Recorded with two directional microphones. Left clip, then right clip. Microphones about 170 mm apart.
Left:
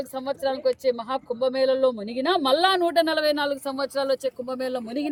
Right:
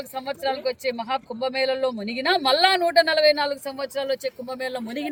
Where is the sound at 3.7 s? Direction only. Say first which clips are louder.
Left 2 dB; 5° left (ahead or behind).